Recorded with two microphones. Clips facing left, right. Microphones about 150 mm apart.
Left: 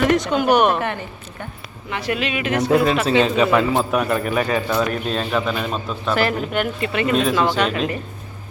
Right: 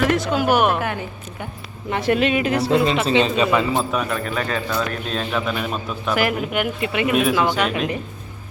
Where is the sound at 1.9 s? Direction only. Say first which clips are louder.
Right 5 dB; 45° right (ahead or behind).